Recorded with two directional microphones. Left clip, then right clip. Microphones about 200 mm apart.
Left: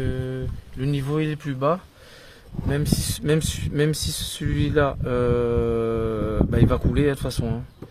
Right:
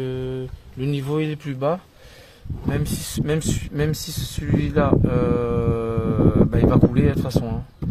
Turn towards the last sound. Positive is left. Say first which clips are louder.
# right 1 dB
turn(degrees=10)  # may be behind; listen again after turning